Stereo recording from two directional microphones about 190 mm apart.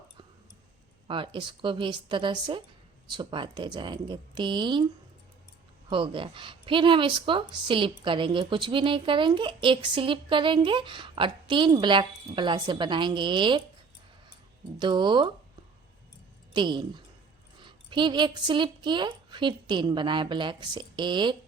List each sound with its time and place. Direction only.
1.0 s a woman's voice: 25° right (ahead or behind)
5.9 s a woman's voice: 25° right (ahead or behind)
14.8 s a woman's voice: 25° right (ahead or behind)
16.5 s a woman's voice: 25° right (ahead or behind)